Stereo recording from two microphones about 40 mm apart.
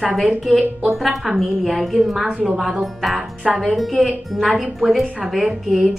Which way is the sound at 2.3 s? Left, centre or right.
Right.